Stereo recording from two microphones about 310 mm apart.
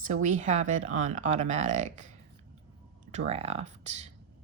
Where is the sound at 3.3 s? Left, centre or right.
Right.